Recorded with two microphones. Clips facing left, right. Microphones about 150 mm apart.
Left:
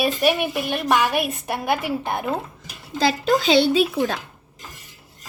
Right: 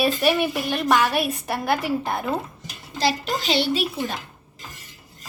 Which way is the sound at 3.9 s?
85° left.